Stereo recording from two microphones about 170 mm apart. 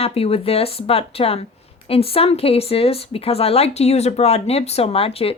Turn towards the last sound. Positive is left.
turn(degrees=35)  # may be behind; listen again after turning